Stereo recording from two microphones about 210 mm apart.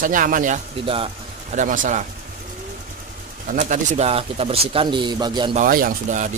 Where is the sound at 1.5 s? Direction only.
35° right (ahead or behind).